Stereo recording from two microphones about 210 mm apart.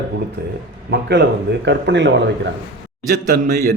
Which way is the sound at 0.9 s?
55° right (ahead or behind).